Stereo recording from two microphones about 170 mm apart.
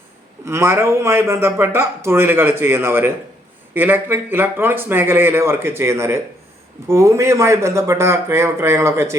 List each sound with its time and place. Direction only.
0.4 s speech: 15° right (ahead or behind)